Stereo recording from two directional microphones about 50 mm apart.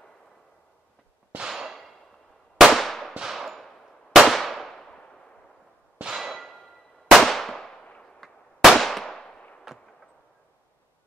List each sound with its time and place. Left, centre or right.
1.5 s a sound: centre
2.6 s firecracker: centre
3.2 s clang: centre
4.2 s firecracker: centre
4.7 s firecracker: centre
6.1 s clang: centre
7.1 s firecracker: centre
9.7 s gunshot: centre